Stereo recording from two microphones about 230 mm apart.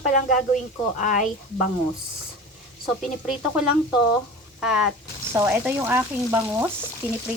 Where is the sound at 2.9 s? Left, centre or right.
Centre.